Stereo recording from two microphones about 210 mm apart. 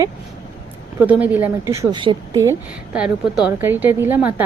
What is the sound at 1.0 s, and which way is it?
A woman's voice, 10° right (ahead or behind).